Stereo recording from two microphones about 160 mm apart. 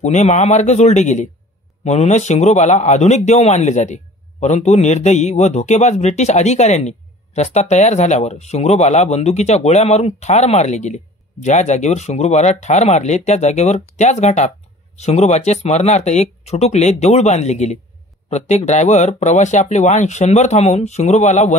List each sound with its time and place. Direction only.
0.0 s a man's voice: 45° left (ahead or behind)